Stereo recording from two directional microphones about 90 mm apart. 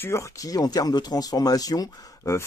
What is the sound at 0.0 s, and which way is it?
Speech, 30° left (ahead or behind).